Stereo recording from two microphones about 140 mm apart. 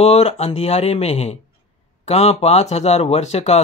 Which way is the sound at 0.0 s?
50° left (ahead or behind).